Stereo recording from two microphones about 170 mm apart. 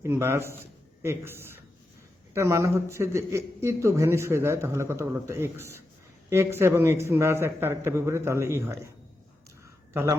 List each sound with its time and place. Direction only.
0.0 s a man's voice: 15° right (ahead or behind)
9.9 s speech: 15° right (ahead or behind)